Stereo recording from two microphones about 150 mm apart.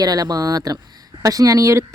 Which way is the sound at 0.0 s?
25° right (ahead or behind).